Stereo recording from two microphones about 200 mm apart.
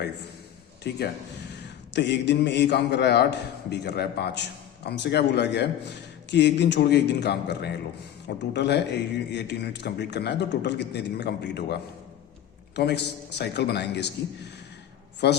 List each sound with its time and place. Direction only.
0.9 s a man's voice: 55° left (ahead or behind)
15.2 s a man's voice: 55° left (ahead or behind)